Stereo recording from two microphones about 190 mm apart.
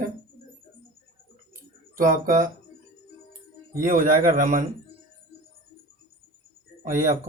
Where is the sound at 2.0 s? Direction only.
45° right (ahead or behind).